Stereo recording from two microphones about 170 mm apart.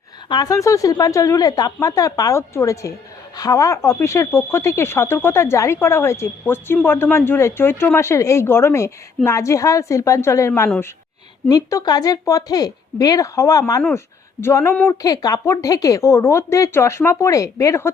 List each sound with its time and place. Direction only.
0.3 s a woman's voice: 20° left (ahead or behind)